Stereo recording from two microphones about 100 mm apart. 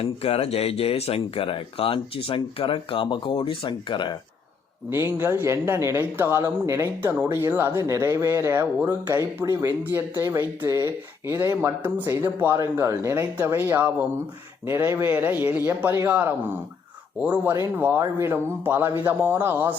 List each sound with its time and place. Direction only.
0.0 s speech: 85° left; by 4.2 s 50° left (ahead or behind)
4.9 s speech: 25° right (ahead or behind)
9.6 s speech: 20° right (ahead or behind)
17.5 s speech: 25° right (ahead or behind)